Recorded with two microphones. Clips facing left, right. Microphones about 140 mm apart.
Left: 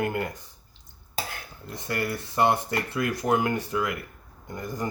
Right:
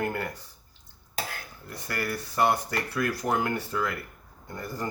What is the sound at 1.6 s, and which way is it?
Speech, 20° left (ahead or behind).